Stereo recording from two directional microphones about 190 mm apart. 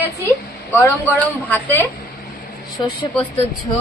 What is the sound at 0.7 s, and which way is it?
Speech, 10° left (ahead or behind).